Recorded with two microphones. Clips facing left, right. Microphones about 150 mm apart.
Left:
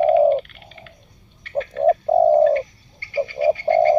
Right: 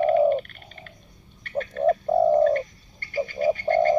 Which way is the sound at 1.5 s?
35° left (ahead or behind).